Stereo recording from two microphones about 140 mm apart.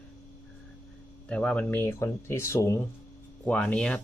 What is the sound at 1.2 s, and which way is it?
Speech, 10° left (ahead or behind).